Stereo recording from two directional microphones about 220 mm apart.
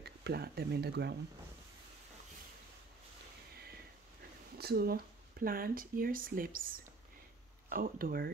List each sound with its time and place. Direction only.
0.0 s speech: 45° right (ahead or behind)
4.6 s speech: 45° right (ahead or behind)